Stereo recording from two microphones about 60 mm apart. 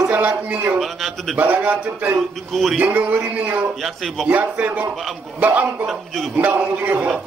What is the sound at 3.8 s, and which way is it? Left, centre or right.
Speech, centre.